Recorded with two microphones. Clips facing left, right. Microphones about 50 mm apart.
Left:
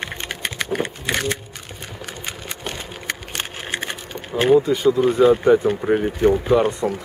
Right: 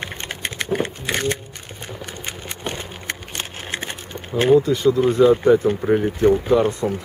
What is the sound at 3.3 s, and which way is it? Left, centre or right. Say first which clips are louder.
Speech: left 2 dB; left.